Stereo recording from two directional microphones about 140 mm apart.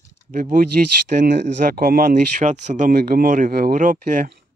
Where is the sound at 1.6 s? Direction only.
90° right; by 4.3 s 65° right (ahead or behind).